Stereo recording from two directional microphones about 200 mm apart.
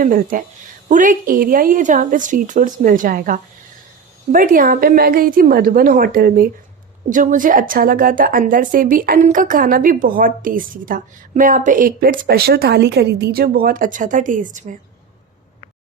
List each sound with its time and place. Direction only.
0.0 s a woman's voice: 45° right (ahead or behind)